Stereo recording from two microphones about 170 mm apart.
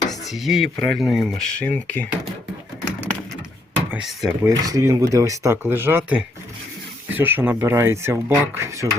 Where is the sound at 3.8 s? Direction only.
5° right (ahead or behind).